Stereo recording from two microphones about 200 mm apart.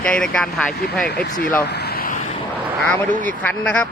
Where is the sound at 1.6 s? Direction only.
55° left (ahead or behind).